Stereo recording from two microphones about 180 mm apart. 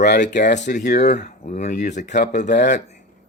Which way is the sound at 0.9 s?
40° left (ahead or behind).